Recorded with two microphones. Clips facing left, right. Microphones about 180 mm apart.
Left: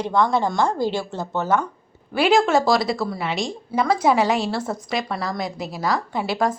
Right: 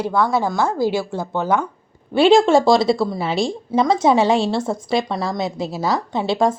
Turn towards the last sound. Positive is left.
turn(degrees=-25)  # may be behind; listen again after turning